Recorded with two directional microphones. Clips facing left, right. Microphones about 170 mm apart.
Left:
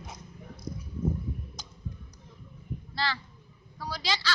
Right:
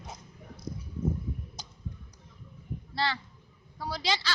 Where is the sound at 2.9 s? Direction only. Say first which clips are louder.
Right 2 dB; 25° right (ahead or behind).